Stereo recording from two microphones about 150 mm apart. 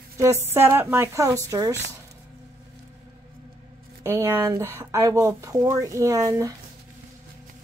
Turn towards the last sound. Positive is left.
turn(degrees=-20)  # may be behind; listen again after turning